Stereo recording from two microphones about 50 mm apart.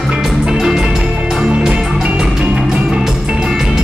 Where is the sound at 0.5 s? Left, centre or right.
Centre.